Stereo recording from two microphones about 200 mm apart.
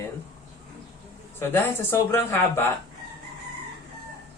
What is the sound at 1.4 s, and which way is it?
Speech, 10° left (ahead or behind).